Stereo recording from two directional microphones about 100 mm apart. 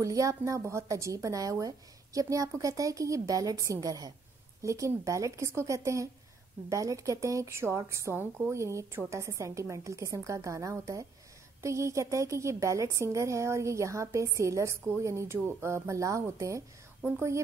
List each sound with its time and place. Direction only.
0.0 s a woman's voice: 35° right (ahead or behind)